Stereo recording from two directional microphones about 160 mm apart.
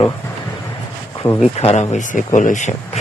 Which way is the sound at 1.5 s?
40° left (ahead or behind).